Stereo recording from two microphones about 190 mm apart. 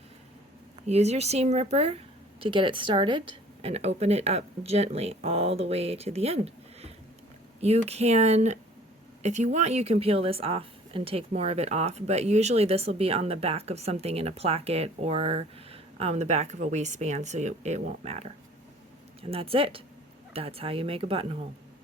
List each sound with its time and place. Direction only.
0.9 s speech: 35° right (ahead or behind)
19.3 s speech: 30° right (ahead or behind)